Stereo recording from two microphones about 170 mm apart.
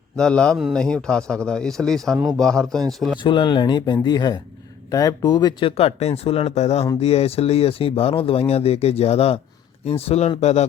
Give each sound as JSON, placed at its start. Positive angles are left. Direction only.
{"t": 0.2, "sound": "a man's voice", "side_deg": 5}
{"t": 3.2, "sound": "speech", "side_deg": 30}